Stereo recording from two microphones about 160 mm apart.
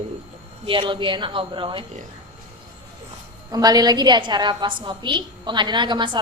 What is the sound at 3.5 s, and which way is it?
A woman's voice, 25° right (ahead or behind).